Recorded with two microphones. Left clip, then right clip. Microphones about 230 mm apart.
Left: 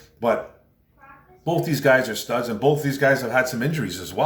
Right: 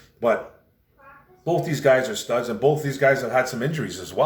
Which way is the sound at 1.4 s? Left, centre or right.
Centre.